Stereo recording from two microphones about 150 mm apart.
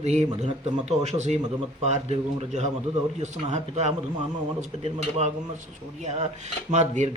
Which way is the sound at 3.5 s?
45° right (ahead or behind).